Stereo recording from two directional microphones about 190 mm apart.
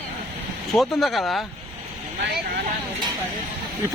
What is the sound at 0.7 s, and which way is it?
Speech, centre (ahead or behind).